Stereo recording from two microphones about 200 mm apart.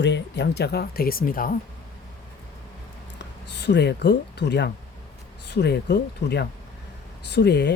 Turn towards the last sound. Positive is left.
turn(degrees=60)  # may be behind; listen again after turning